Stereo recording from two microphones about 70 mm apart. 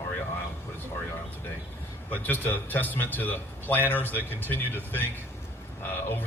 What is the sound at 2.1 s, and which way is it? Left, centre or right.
Speech, left.